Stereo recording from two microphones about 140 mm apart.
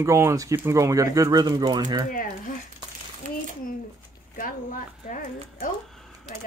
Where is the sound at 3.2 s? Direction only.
70° right (ahead or behind).